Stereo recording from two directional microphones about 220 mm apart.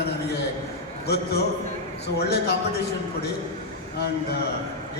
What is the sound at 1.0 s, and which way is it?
A man's voice, 50° left (ahead or behind).